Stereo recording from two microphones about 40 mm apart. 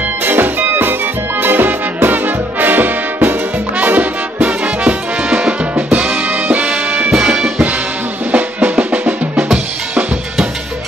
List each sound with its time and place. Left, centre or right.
0.2 s music: right
3.8 s music: right
7.1 s music: right
7.3 s music: centre
8.5 s drum: right